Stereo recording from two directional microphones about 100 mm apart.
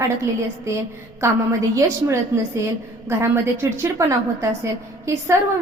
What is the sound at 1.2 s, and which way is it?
A woman's voice, 30° right (ahead or behind).